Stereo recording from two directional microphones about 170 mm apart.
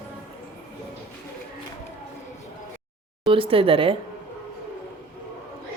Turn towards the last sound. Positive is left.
turn(degrees=-35)  # may be behind; listen again after turning